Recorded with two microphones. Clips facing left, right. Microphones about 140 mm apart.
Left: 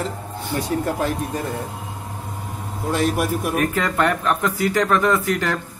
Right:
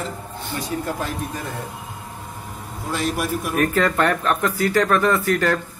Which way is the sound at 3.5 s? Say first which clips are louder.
Right 3 dB; 15° left (ahead or behind).